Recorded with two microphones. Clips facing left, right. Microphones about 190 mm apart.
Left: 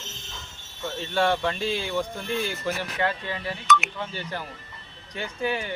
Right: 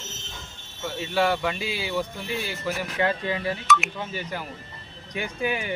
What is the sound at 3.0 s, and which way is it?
Speech, 15° right (ahead or behind).